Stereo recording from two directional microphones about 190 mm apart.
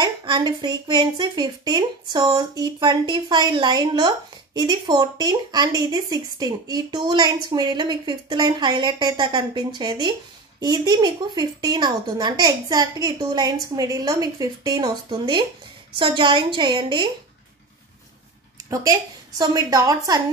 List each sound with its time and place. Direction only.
0.0 s speech: 20° right (ahead or behind)
18.7 s speech: 20° right (ahead or behind)